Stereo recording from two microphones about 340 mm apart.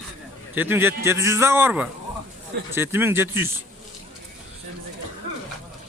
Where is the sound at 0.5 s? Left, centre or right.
Centre.